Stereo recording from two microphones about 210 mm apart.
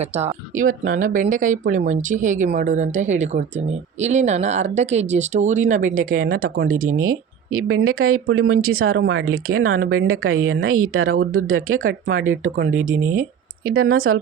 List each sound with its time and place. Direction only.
0.0 s speech: 30° right (ahead or behind)
0.5 s speech: 75° right (ahead or behind)
0.9 s speech: 40° right (ahead or behind)
6.7 s speech: 85° right